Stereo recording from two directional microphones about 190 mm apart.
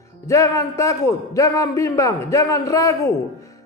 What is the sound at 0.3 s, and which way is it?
Speech, 15° left (ahead or behind).